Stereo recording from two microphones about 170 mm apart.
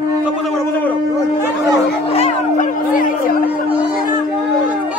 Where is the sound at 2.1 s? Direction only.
35° left (ahead or behind).